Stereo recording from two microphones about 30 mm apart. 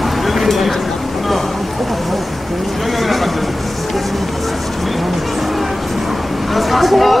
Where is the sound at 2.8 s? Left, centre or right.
Centre.